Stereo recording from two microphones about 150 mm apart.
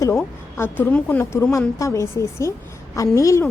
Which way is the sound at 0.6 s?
10° left (ahead or behind).